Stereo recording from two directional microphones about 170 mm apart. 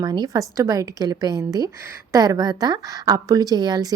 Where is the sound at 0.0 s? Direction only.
25° right (ahead or behind).